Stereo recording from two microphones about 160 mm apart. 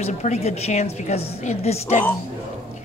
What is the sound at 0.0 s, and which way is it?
A woman's voice, 45° left (ahead or behind).